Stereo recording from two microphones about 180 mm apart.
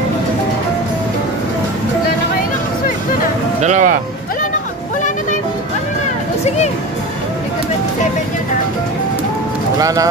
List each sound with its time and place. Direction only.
3.6 s speech: 45° right (ahead or behind)
9.8 s speech: 20° right (ahead or behind)